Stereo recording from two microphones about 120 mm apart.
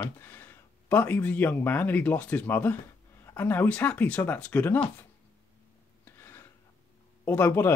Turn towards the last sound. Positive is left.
turn(degrees=15)  # may be behind; listen again after turning